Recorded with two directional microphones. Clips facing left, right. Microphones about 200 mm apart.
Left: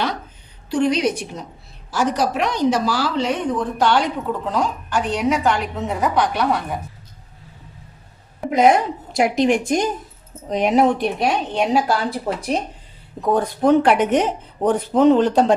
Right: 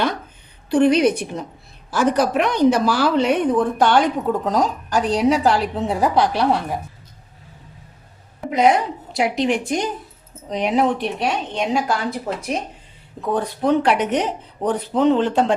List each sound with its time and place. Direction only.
0.7 s a woman's voice: 55° right (ahead or behind); by 6.7 s 30° right (ahead or behind)
8.4 s speech: 50° left (ahead or behind)
13.3 s speech: 45° left (ahead or behind)